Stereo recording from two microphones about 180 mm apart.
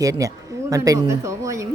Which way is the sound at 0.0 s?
20° right (ahead or behind).